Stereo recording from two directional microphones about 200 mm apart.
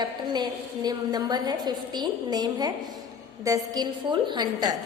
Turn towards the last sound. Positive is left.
turn(degrees=-20)  # may be behind; listen again after turning